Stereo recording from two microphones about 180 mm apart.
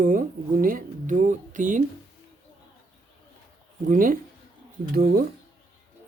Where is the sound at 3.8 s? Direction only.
50° right (ahead or behind).